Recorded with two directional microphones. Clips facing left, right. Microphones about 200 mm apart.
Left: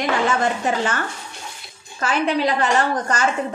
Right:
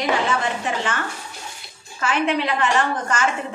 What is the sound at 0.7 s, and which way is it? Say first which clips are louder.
Speech: left 4 dB; 40° left (ahead or behind).